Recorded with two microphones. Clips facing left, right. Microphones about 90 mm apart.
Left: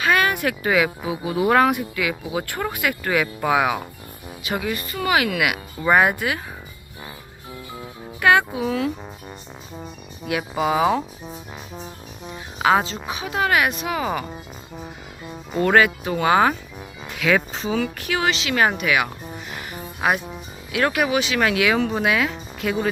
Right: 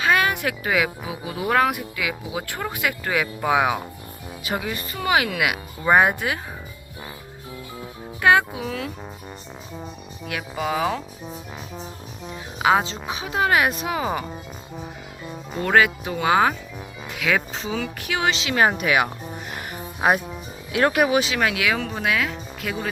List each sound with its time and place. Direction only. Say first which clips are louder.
0.0 s music: left 1 dB; 20° right (ahead or behind)
0.6 s speech: left 4 dB; centre (ahead or behind)
1.7 s speech: left 4 dB; 10° right (ahead or behind)
4.5 s speech: left 2 dB; 25° right (ahead or behind)
8.2 s speech: even; 20° right (ahead or behind)
8.5 s speech: left 6 dB; 5° left (ahead or behind)
10.2 s speech: left 5 dB; 10° left (ahead or behind)
12.8 s speech: left 1 dB; 25° right (ahead or behind)
15.5 s speech: left 2 dB; centre (ahead or behind)
18.0 s speech: left 2 dB; 15° right (ahead or behind)
18.3 s speech: even; 25° right (ahead or behind)
18.8 s speech: right 1 dB; 35° right (ahead or behind)
21.3 s speech: left 3 dB; 5° right (ahead or behind)